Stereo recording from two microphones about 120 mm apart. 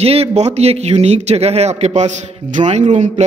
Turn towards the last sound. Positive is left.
turn(degrees=-80)